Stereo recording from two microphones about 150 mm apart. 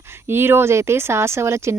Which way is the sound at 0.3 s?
15° right (ahead or behind).